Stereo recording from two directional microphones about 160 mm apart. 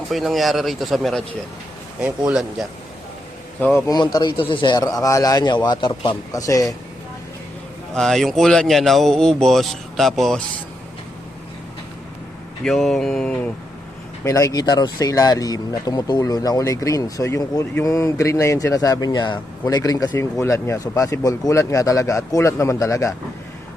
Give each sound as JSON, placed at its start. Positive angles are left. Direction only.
{"t": 0.1, "sound": "speech", "side_deg": 0}
{"t": 3.6, "sound": "a man's voice", "side_deg": 15}
{"t": 3.9, "sound": "speech", "side_deg": 25}
{"t": 7.9, "sound": "speech", "side_deg": 5}
{"t": 12.6, "sound": "speech", "side_deg": 0}
{"t": 14.3, "sound": "speech", "side_deg": 20}